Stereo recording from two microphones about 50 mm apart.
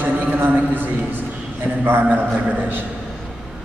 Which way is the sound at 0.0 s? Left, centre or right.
Right.